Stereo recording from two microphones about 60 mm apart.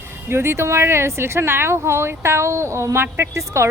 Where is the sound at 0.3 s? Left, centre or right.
Right.